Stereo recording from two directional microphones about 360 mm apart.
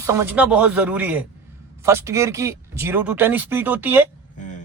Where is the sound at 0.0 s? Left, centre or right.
Centre.